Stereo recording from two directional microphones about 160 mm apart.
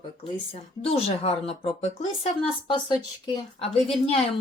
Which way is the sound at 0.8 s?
40° left (ahead or behind).